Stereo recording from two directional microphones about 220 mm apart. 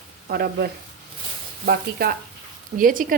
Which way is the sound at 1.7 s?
45° right (ahead or behind).